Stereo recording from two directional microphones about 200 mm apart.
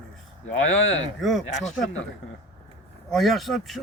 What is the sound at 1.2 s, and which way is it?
Speech, centre (ahead or behind).